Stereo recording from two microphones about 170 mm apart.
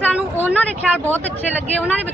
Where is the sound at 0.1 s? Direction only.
10° right (ahead or behind).